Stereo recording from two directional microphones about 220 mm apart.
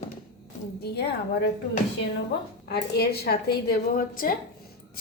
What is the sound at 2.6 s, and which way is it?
A woman's voice, 45° left (ahead or behind).